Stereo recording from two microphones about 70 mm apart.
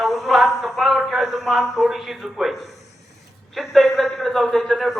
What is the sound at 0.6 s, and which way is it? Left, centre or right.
A man's voice, centre.